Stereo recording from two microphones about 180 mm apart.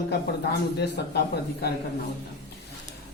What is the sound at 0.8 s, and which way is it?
Speech, 65° left (ahead or behind).